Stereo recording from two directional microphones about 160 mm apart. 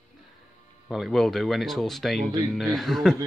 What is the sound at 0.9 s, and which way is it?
Speech, centre (ahead or behind).